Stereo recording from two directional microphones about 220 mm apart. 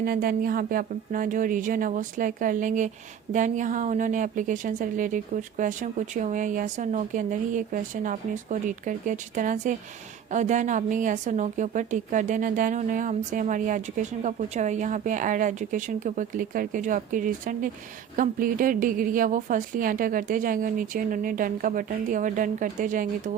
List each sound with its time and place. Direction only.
0.0 s a woman's voice: 40° right (ahead or behind)